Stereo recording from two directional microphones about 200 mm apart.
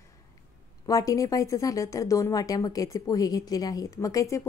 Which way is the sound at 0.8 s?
15° left (ahead or behind).